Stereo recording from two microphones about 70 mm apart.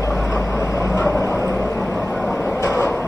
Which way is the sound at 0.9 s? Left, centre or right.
Left.